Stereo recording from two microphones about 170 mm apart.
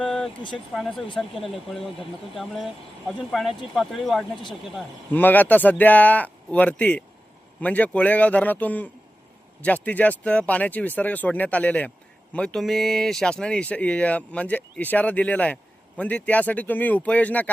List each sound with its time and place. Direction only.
0.0 s vehicle: centre (ahead or behind)
0.7 s speech: centre (ahead or behind)
5.1 s speech: 10° left (ahead or behind)